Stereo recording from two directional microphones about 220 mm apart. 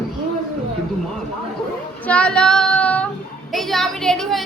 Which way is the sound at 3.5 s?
Centre (ahead or behind).